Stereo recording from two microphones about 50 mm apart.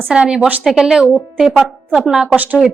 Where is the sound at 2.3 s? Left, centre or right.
Right.